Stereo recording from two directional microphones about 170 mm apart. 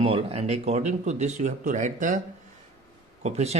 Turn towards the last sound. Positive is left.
turn(degrees=-40)  # may be behind; listen again after turning